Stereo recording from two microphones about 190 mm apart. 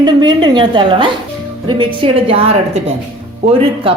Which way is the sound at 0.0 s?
25° right (ahead or behind).